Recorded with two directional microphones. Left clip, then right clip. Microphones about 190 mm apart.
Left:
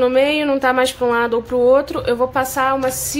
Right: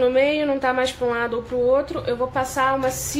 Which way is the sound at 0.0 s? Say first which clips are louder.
Left 3 dB; 30° left (ahead or behind).